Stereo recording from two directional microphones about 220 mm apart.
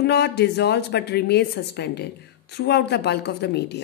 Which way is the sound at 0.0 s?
50° left (ahead or behind).